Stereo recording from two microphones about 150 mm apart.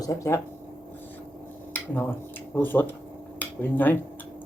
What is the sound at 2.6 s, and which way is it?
Speech, 15° left (ahead or behind).